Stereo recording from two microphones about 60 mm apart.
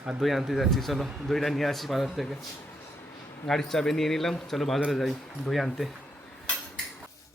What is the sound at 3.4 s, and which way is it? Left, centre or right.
A man's voice, centre.